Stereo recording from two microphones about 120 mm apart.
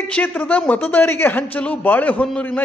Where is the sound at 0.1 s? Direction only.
10° left (ahead or behind).